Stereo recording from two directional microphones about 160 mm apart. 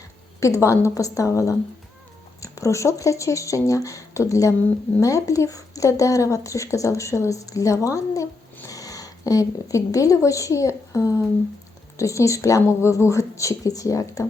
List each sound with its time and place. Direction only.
0.3 s a woman's voice: 20° left (ahead or behind)